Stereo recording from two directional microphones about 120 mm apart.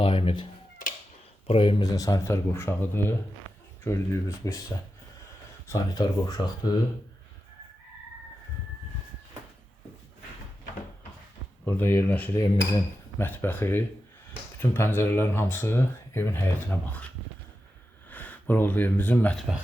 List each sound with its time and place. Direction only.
0.0 s cat: 45° left (ahead or behind)
0.8 s cat: 90° left
1.5 s speech: 50° left (ahead or behind)
1.8 s speech: 30° left (ahead or behind)
5.6 s speech: 30° left (ahead or behind)
11.6 s speech: 15° left (ahead or behind)
18.1 s speech: 15° left (ahead or behind)